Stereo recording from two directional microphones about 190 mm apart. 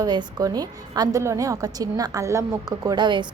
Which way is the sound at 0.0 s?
20° right (ahead or behind).